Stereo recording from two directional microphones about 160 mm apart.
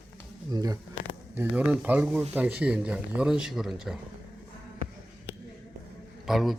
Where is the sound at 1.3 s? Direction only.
10° right (ahead or behind).